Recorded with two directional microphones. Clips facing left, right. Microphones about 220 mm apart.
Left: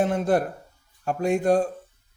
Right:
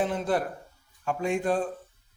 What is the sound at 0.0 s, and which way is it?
A man's voice, 45° left (ahead or behind).